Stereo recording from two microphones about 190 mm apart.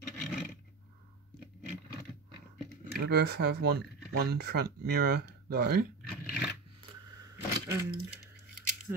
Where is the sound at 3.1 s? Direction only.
60° right (ahead or behind).